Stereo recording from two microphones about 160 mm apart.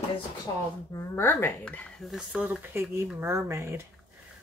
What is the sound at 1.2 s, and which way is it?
Speech, 15° left (ahead or behind).